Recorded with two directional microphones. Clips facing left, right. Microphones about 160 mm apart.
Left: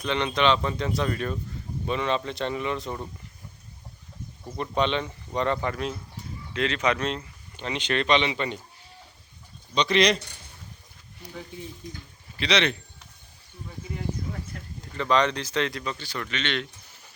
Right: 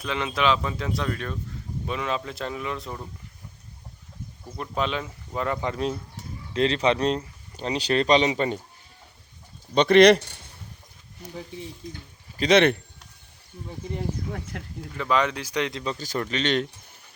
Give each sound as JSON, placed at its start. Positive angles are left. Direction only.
{"t": 0.0, "sound": "speech", "side_deg": -5}
{"t": 4.5, "sound": "speech", "side_deg": -5}
{"t": 6.5, "sound": "speech", "side_deg": -35}
{"t": 9.7, "sound": "speech", "side_deg": -55}
{"t": 12.4, "sound": "a man's voice", "side_deg": -50}
{"t": 14.5, "sound": "speech", "side_deg": -80}
{"t": 14.9, "sound": "speech", "side_deg": -5}
{"t": 15.8, "sound": "speech", "side_deg": -35}